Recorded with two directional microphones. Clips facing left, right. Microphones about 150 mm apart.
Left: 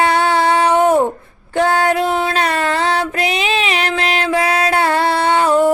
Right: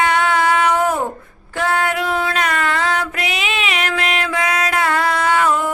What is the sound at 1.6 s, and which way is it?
Female singing, 35° left (ahead or behind).